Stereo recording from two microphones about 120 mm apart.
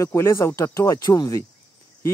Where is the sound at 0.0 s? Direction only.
25° left (ahead or behind).